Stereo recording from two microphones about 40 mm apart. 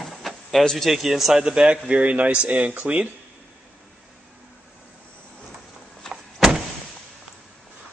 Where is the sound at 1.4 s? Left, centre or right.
Right.